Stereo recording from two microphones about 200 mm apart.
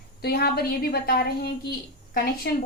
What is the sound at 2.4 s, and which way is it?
Speech, 55° left (ahead or behind).